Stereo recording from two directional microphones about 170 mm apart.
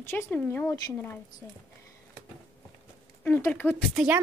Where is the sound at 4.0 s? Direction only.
Centre (ahead or behind).